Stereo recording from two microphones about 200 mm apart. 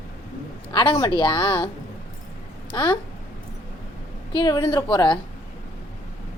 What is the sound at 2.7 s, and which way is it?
Speech, 25° left (ahead or behind).